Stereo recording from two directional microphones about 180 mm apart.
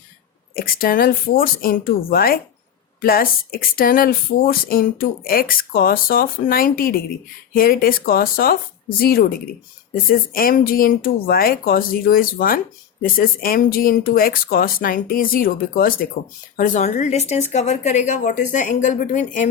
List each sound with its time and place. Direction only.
0.5 s speech: 55° left (ahead or behind)